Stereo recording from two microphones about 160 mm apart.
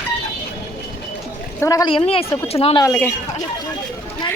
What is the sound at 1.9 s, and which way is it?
Speech, 35° left (ahead or behind).